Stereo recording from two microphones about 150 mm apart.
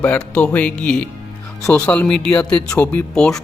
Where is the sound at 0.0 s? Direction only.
10° left (ahead or behind).